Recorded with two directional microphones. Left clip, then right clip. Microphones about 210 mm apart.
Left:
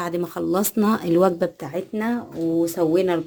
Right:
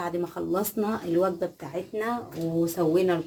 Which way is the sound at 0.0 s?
55° left (ahead or behind).